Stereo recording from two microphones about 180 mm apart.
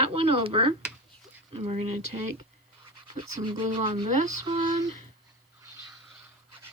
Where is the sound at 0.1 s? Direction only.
30° right (ahead or behind).